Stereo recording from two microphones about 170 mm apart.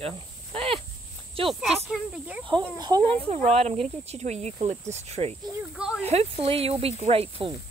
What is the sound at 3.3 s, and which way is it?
Speech, 40° right (ahead or behind).